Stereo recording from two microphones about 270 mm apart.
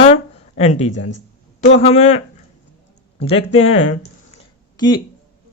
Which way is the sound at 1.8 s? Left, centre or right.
Left.